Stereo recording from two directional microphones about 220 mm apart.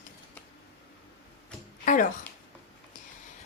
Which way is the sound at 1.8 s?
35° left (ahead or behind).